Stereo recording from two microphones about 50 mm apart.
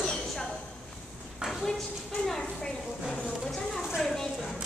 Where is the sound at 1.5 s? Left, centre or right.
Centre.